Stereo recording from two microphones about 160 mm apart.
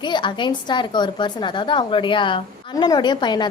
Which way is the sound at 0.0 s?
30° left (ahead or behind).